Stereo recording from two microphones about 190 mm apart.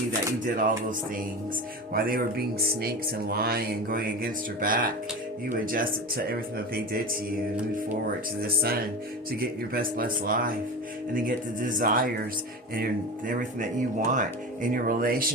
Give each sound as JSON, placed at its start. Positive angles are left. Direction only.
{"t": 0.4, "sound": "speech", "side_deg": -45}
{"t": 8.4, "sound": "speech", "side_deg": -50}